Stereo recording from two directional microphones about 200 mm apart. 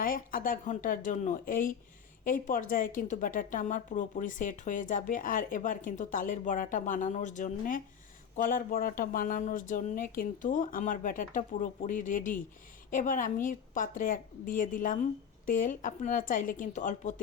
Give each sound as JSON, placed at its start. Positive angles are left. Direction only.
{"t": 0.0, "sound": "a woman's voice", "side_deg": 45}